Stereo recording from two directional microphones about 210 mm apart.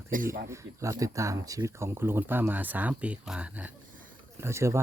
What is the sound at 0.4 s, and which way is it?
Speech, 15° right (ahead or behind).